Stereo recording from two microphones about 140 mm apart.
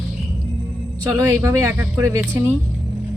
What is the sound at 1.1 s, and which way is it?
Speech, 15° right (ahead or behind).